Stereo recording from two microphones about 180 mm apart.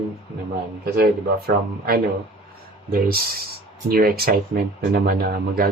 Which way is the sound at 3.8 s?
55° right (ahead or behind).